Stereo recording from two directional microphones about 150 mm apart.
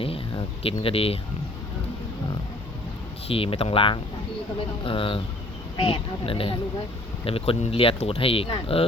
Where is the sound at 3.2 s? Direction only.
40° left (ahead or behind).